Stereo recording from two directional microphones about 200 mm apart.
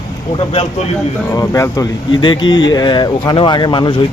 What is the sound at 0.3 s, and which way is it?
Speech, 30° left (ahead or behind).